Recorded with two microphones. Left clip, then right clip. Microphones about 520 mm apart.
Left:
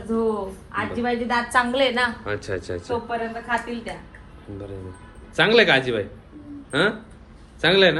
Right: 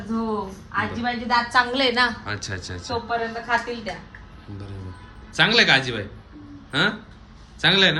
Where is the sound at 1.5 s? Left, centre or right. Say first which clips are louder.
Left 1 dB; centre.